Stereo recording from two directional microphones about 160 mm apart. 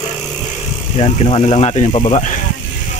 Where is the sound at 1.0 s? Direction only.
40° left (ahead or behind).